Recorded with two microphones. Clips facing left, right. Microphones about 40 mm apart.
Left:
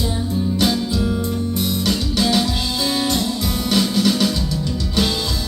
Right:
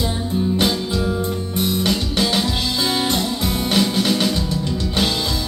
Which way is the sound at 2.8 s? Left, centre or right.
Right.